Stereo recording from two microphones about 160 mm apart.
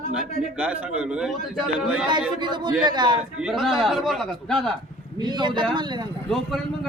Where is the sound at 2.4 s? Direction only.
30° right (ahead or behind).